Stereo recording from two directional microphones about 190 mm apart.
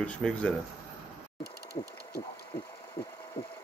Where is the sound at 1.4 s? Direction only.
60° left (ahead or behind).